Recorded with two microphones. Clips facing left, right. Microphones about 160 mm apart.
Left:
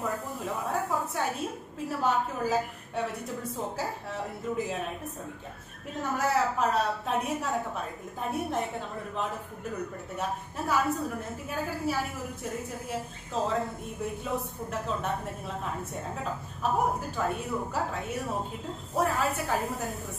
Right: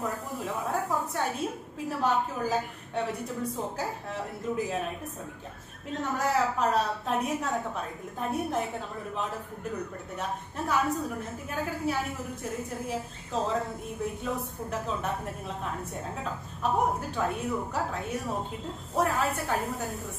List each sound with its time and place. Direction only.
0.0 s a woman's voice: centre (ahead or behind)
6.0 s a woman's voice: centre (ahead or behind)
10.7 s a woman's voice: centre (ahead or behind)